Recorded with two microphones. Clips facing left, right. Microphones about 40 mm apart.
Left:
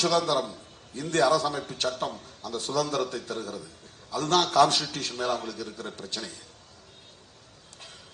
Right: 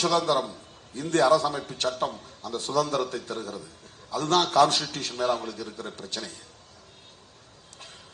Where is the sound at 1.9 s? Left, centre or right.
Right.